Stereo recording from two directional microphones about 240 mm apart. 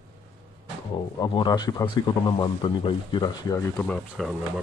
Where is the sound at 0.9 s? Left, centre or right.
Centre.